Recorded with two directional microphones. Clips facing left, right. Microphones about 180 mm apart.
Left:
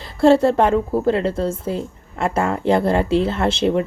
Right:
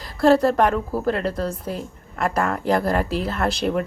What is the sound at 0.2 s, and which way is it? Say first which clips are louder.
Speech: left 3 dB; 25° left (ahead or behind).